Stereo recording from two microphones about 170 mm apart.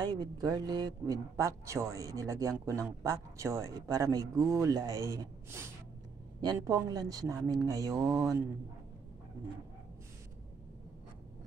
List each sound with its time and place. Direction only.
0.0 s speech: 25° right (ahead or behind)